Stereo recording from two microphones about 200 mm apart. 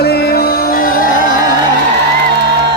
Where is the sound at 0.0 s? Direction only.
55° left (ahead or behind).